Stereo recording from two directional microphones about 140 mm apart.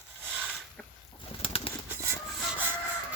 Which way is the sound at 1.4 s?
40° left (ahead or behind).